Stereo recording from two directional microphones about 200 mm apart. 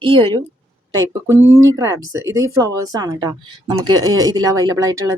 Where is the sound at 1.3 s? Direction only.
15° right (ahead or behind).